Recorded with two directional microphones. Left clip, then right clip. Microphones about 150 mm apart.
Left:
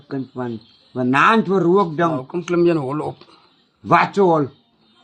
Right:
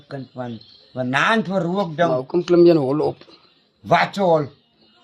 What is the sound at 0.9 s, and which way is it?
A man's voice, 30° right (ahead or behind).